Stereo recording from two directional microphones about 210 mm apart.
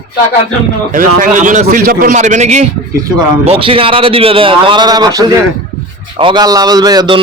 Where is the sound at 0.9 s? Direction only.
40° right (ahead or behind).